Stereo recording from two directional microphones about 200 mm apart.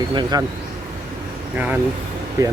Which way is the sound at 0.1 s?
20° right (ahead or behind).